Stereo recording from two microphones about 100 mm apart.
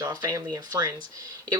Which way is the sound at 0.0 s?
40° right (ahead or behind).